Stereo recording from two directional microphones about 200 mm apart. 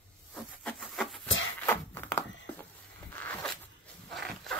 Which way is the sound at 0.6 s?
5° left (ahead or behind).